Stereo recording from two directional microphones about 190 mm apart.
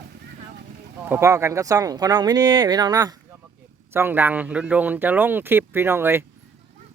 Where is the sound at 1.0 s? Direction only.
15° right (ahead or behind).